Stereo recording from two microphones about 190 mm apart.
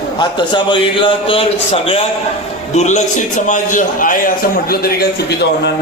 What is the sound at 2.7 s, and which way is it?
A man's voice, 35° left (ahead or behind).